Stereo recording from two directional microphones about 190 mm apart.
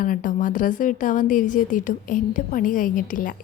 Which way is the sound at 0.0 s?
45° left (ahead or behind).